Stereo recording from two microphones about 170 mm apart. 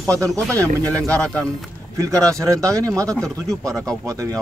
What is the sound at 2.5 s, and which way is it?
Speech, 20° right (ahead or behind).